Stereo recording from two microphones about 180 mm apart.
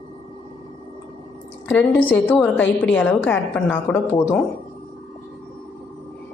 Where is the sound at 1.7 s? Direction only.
10° left (ahead or behind).